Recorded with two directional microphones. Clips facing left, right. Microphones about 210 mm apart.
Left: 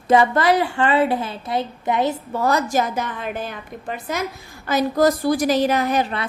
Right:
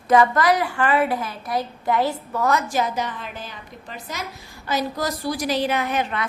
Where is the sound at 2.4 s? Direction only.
40° left (ahead or behind).